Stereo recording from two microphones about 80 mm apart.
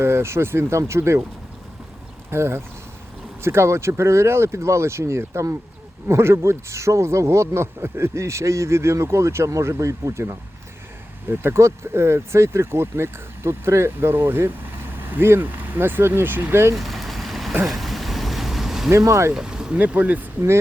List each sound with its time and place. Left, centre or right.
0.0 s speech: right
2.3 s speech: right
16.7 s vehicle: centre
18.9 s speech: right
19.3 s speech: centre